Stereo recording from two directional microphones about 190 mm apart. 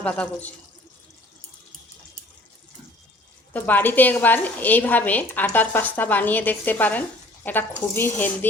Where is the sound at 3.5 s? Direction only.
10° left (ahead or behind).